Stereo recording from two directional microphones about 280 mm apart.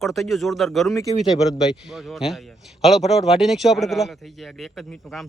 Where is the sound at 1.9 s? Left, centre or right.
Centre.